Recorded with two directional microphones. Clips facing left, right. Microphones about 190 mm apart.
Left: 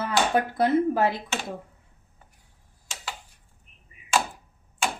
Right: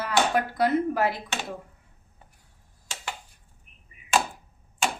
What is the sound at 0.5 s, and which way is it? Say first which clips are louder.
Speech: left 3 dB; 25° left (ahead or behind).